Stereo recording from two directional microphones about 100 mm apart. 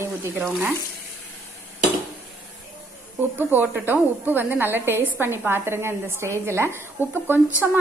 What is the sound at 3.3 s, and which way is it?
A woman's voice, 20° right (ahead or behind).